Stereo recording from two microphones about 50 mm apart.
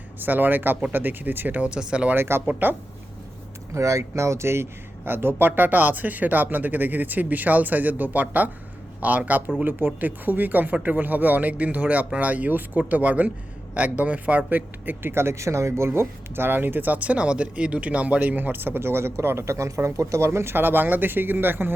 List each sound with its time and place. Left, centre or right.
0.2 s speech: right
1.6 s speech: centre
2.1 s speech: right
2.5 s speech: right
3.8 s a man's voice: right
15.1 s speech: right
15.9 s speech: right